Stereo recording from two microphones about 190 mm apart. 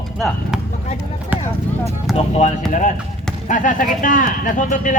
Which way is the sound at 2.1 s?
Centre (ahead or behind).